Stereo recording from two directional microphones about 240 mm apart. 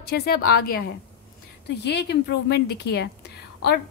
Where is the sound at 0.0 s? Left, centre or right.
Left.